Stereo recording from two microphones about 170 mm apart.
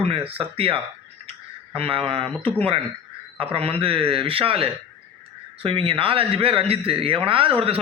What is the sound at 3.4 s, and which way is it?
A man's voice, 35° right (ahead or behind).